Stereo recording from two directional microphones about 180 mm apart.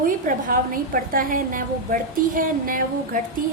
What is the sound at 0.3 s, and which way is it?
A woman's voice, 50° right (ahead or behind).